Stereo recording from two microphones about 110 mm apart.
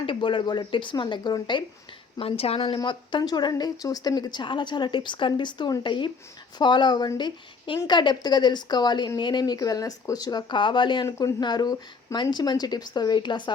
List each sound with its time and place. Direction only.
0.0 s speech: 50° left (ahead or behind)
2.1 s a woman's voice: 60° left (ahead or behind); by 13.5 s 45° left (ahead or behind)